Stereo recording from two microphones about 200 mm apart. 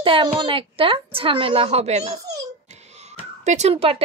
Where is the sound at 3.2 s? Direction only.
35° right (ahead or behind).